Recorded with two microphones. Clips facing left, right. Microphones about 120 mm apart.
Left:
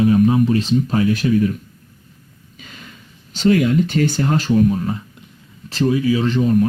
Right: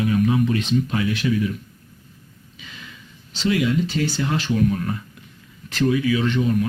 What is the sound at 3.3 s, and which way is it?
Speech, 50° left (ahead or behind).